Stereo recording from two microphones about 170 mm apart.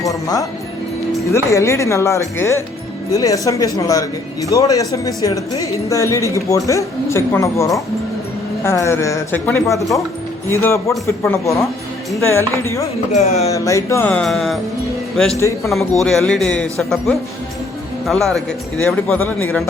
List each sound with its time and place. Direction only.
1.3 s speech: 15° left (ahead or behind)
13.1 s speech: 40° left (ahead or behind)
13.5 s a man's voice: 20° left (ahead or behind)